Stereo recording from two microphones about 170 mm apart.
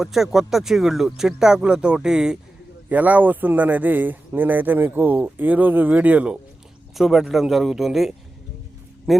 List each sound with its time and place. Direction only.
0.0 s speech: centre (ahead or behind)